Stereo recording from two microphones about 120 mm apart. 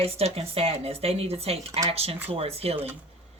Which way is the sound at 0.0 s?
60° right (ahead or behind).